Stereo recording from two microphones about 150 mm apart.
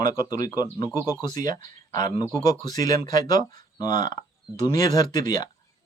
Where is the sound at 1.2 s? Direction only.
25° left (ahead or behind).